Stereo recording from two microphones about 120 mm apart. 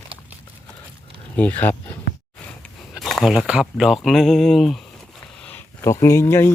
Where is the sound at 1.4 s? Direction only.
15° left (ahead or behind).